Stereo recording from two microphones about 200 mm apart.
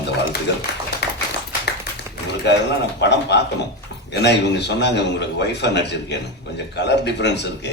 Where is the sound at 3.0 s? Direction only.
60° left (ahead or behind).